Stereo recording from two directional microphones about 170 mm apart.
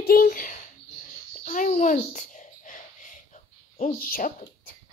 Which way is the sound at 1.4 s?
50° left (ahead or behind).